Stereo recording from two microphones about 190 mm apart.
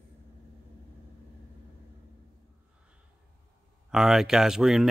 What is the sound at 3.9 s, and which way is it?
Speech, centre (ahead or behind).